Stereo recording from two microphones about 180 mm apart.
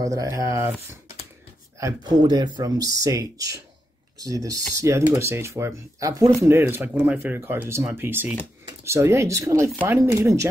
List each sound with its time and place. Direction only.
0.0 s speech: 20° right (ahead or behind)
1.8 s speech: 20° right (ahead or behind)